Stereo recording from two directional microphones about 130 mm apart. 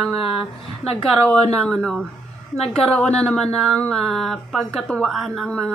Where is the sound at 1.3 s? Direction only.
5° left (ahead or behind).